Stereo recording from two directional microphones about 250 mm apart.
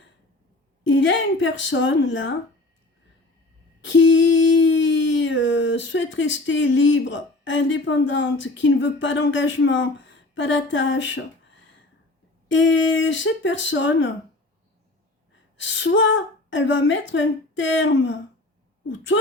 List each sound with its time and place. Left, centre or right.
0.9 s a woman's voice: left
3.8 s a sound: left
12.5 s a woman's voice: left
15.5 s a woman's voice: left